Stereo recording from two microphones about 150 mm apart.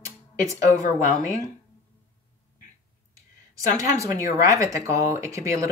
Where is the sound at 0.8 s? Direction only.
60° left (ahead or behind).